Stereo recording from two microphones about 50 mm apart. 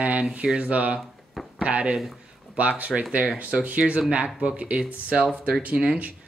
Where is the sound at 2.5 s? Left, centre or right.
Right.